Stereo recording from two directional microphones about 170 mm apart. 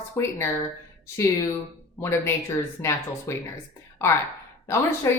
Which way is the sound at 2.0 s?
15° left (ahead or behind).